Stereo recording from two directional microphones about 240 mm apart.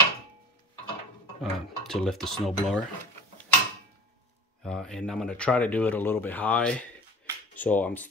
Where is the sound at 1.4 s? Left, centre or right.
Centre.